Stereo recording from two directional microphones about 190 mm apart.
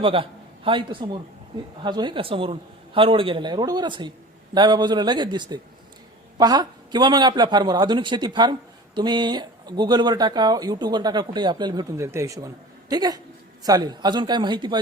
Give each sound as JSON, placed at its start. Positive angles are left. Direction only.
{"t": 0.0, "sound": "a man's voice", "side_deg": -30}